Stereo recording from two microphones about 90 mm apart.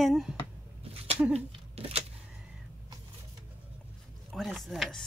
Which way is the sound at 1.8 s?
90° right.